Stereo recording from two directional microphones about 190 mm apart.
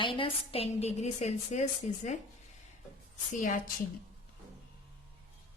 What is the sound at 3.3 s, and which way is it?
Speech, 40° left (ahead or behind).